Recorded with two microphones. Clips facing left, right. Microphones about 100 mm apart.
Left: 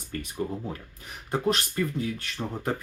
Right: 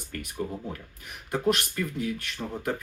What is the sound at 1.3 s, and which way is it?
Speech, 30° left (ahead or behind).